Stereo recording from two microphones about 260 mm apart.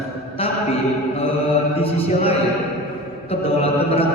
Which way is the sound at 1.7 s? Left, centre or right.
Left.